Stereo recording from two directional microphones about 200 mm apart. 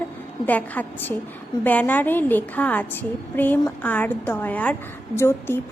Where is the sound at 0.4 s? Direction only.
10° left (ahead or behind).